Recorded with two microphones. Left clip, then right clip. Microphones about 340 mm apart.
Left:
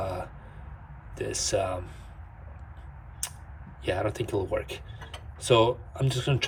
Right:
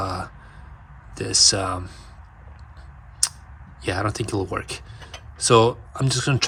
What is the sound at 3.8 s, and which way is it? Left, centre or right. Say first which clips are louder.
Speech: right 4 dB; centre.